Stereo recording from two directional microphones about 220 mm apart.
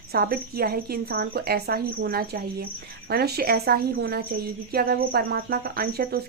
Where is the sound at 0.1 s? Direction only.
45° right (ahead or behind).